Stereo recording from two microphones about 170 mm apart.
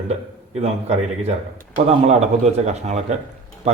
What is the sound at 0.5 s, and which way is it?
A man's voice, 40° right (ahead or behind).